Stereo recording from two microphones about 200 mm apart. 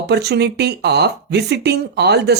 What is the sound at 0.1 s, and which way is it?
Speech, 55° right (ahead or behind).